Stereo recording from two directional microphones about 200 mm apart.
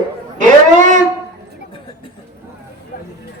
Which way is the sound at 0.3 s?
40° right (ahead or behind).